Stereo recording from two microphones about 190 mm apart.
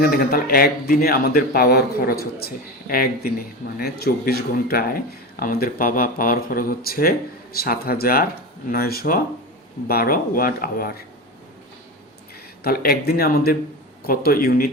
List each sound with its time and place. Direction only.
0.0 s speech: 50° left (ahead or behind)
12.6 s speech: 50° left (ahead or behind)